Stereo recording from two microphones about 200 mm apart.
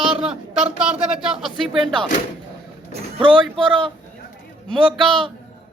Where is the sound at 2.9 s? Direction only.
25° right (ahead or behind).